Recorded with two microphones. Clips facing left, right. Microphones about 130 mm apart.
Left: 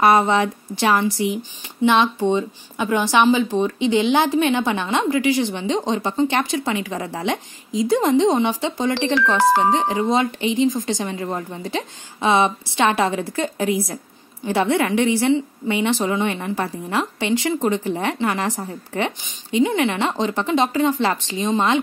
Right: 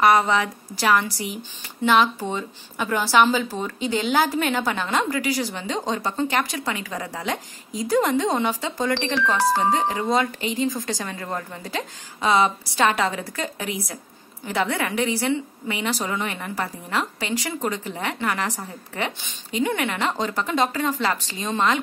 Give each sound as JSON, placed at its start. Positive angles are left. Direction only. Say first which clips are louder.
{"t": 0.0, "sound": "a woman's voice", "louder": "left 3 dB", "side_deg": 30}
{"t": 9.4, "sound": "speech", "louder": "left 4 dB", "side_deg": 90}
{"t": 9.8, "sound": "a woman's voice", "louder": "left 3 dB", "side_deg": 25}